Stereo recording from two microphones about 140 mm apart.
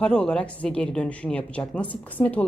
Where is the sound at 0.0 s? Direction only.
5° left (ahead or behind).